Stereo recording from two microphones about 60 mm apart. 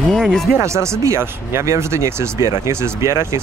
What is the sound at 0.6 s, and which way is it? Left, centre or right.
Speech, right.